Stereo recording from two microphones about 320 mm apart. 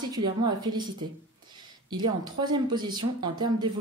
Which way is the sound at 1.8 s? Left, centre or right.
Centre.